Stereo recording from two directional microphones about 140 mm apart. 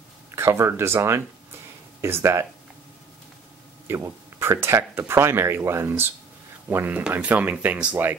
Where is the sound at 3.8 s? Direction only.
20° right (ahead or behind).